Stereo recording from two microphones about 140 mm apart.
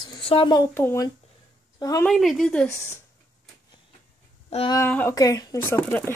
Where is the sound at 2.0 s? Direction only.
Centre (ahead or behind).